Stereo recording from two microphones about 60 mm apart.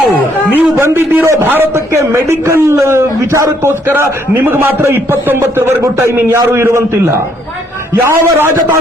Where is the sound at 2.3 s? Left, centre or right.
Right.